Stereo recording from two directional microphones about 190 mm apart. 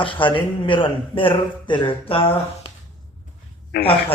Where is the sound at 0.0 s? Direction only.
25° left (ahead or behind).